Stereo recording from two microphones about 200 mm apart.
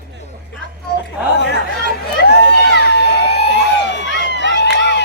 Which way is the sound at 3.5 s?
60° left (ahead or behind).